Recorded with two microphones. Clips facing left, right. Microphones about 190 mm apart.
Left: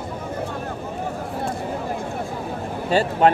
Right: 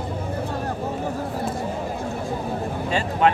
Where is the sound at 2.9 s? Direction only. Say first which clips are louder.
Left 4 dB; 40° left (ahead or behind).